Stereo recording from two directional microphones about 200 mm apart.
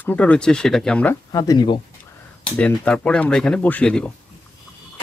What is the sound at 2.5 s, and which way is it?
Speech, 5° left (ahead or behind).